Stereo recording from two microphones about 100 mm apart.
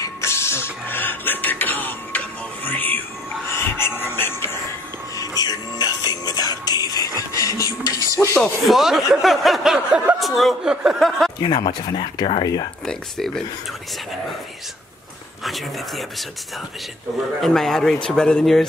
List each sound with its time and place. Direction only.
0.0 s a sound: 25° left (ahead or behind)
5.4 s music: 40° left (ahead or behind)
8.4 s speech: centre (ahead or behind)
11.4 s speech: 50° left (ahead or behind)
12.8 s speech: 5° left (ahead or behind)
15.4 s speech: centre (ahead or behind)
17.4 s speech: 5° left (ahead or behind)